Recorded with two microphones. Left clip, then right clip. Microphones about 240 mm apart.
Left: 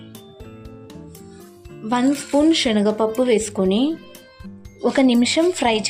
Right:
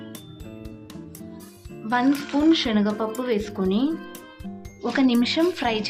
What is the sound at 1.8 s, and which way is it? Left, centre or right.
Music, centre.